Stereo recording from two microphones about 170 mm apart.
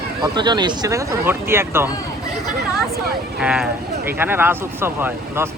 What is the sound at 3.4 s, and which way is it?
Speech, 5° right (ahead or behind).